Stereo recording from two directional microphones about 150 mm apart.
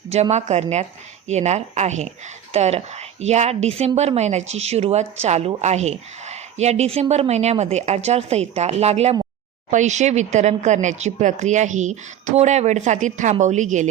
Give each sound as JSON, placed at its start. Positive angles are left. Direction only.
{"t": 0.1, "sound": "speech", "side_deg": -45}